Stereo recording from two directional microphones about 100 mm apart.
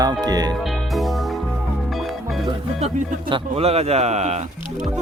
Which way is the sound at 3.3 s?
85° right.